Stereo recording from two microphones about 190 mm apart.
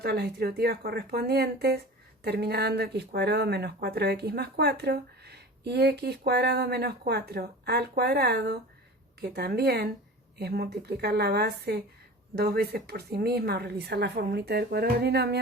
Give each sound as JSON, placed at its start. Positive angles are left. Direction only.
{"t": 0.0, "sound": "speech", "side_deg": -55}